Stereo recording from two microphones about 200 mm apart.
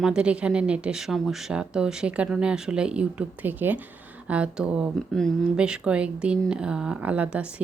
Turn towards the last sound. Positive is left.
turn(degrees=-5)  # may be behind; listen again after turning